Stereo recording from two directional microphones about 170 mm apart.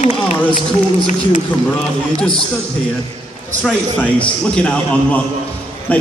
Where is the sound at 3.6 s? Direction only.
10° left (ahead or behind).